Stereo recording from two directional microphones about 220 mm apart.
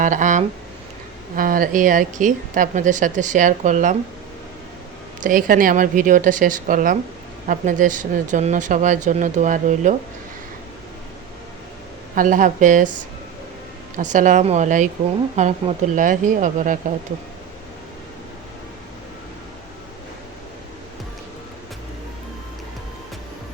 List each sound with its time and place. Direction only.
0.0 s a woman's voice: 35° right (ahead or behind)
5.2 s a woman's voice: 40° right (ahead or behind)
12.1 s a woman's voice: 35° right (ahead or behind)
14.0 s a woman's voice: 35° right (ahead or behind)